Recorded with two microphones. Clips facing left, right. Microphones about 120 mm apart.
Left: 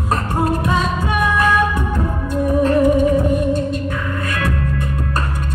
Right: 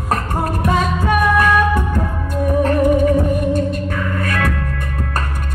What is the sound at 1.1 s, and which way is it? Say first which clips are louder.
Music: right 3 dB; 55° right (ahead or behind).